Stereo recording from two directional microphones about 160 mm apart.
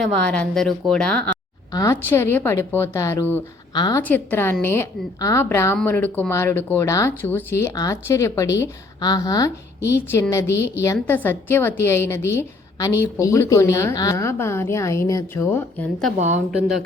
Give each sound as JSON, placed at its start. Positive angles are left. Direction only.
{"t": 0.0, "sound": "a woman's voice", "side_deg": 5}
{"t": 1.7, "sound": "a woman's voice", "side_deg": 20}
{"t": 3.8, "sound": "a woman's voice", "side_deg": 25}
{"t": 4.0, "sound": "speech", "side_deg": 10}
{"t": 16.1, "sound": "a woman's voice", "side_deg": -50}
{"t": 16.5, "sound": "a woman's voice", "side_deg": -5}